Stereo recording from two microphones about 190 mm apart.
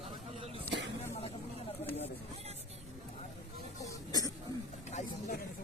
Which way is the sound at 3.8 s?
20° left (ahead or behind).